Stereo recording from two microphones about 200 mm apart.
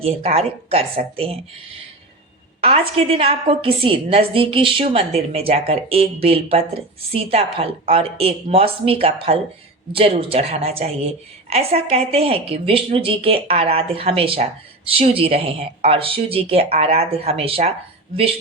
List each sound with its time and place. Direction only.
0.0 s a woman's voice: 30° right (ahead or behind)
2.6 s a woman's voice: 30° right (ahead or behind)